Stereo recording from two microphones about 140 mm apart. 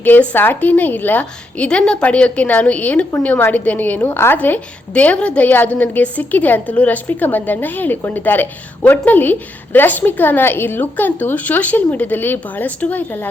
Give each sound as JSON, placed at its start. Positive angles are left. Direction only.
{"t": 0.0, "sound": "a woman's voice", "side_deg": 10}